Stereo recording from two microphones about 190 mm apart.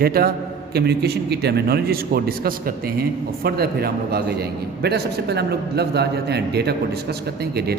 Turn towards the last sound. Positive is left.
turn(degrees=-55)  # may be behind; listen again after turning